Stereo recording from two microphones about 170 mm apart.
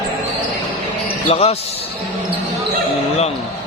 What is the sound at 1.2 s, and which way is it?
Speech, 35° left (ahead or behind).